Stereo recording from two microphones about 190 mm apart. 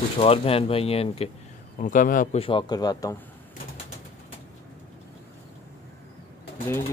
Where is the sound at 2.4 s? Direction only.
25° left (ahead or behind).